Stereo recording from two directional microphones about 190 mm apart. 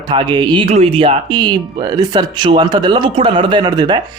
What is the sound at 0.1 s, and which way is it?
Speech, 25° right (ahead or behind).